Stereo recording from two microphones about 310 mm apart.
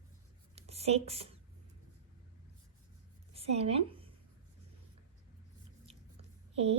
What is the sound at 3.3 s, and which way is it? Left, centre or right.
Speech, centre.